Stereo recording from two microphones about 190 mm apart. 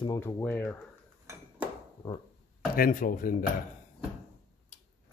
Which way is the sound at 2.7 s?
45° left (ahead or behind).